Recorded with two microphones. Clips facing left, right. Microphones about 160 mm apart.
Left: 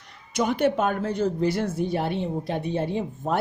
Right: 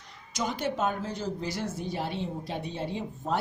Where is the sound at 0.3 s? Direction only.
60° left (ahead or behind).